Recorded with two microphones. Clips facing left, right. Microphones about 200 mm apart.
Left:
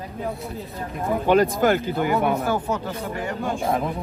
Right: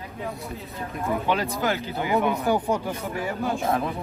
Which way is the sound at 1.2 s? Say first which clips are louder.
Left 10 dB; 50° left (ahead or behind).